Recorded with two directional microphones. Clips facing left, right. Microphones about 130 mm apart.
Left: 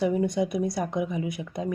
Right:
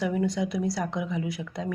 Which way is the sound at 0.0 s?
20° left (ahead or behind).